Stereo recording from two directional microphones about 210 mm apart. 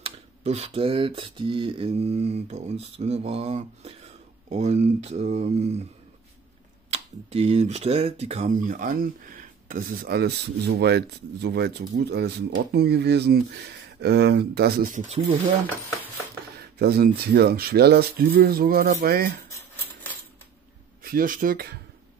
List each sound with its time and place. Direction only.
0.0 s speech: 30° right (ahead or behind)
6.9 s speech: 30° right (ahead or behind)
16.5 s speech: 50° right (ahead or behind)
21.0 s speech: 40° right (ahead or behind)